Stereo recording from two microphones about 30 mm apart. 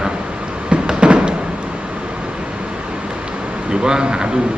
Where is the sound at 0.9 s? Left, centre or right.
Right.